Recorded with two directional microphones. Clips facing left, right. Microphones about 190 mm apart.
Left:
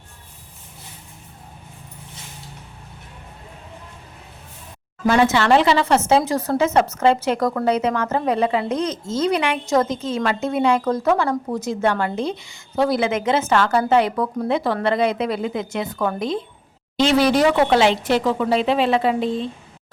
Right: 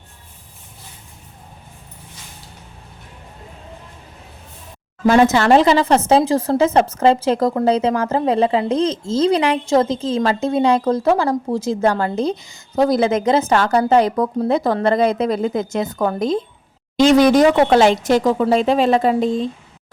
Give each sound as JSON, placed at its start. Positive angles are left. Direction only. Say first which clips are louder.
{"t": 5.0, "sound": "speech", "louder": "right 4 dB", "side_deg": -40}